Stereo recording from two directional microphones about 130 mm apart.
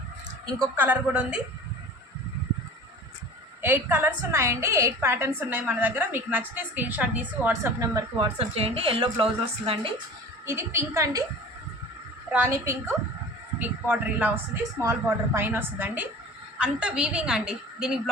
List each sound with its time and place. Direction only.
0.8 s a woman's voice: 10° right (ahead or behind)
3.6 s a woman's voice: 15° right (ahead or behind)
8.4 s a woman's voice: 50° right (ahead or behind)
10.4 s a woman's voice: 20° right (ahead or behind)
12.5 s a woman's voice: 25° right (ahead or behind); by 18.1 s 5° right (ahead or behind)